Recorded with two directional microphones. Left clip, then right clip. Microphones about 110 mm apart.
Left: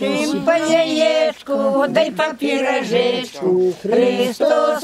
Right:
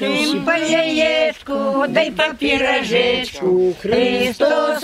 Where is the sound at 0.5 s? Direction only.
5° left (ahead or behind).